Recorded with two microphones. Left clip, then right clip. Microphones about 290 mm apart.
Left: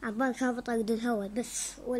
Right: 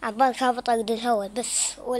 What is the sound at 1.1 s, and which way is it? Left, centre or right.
Speech, right.